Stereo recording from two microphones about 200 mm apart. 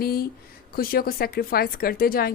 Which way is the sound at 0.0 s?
50° left (ahead or behind).